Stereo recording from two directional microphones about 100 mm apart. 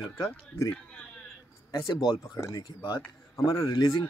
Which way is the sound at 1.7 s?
45° left (ahead or behind).